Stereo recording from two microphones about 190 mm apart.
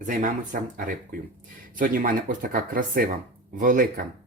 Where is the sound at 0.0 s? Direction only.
45° right (ahead or behind).